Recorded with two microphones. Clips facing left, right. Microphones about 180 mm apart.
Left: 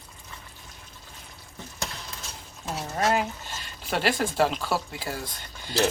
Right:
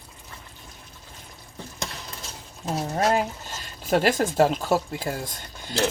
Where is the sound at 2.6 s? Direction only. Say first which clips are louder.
Right 3 dB; 35° right (ahead or behind).